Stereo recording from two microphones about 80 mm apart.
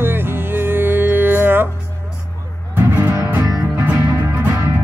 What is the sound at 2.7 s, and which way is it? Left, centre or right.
Music, right.